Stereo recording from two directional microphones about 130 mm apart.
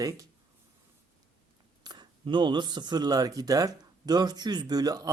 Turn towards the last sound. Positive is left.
turn(degrees=-30)  # may be behind; listen again after turning